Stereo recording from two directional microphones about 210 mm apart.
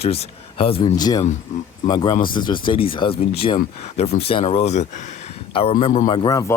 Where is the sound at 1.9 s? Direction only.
20° left (ahead or behind).